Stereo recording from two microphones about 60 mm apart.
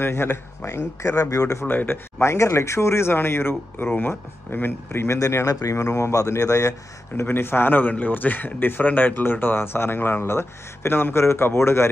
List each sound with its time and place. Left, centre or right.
0.0 s speech: left
1.3 s speech: left
1.7 s speech: left
2.3 s speech: left
5.4 s speech: left
7.2 s speech: left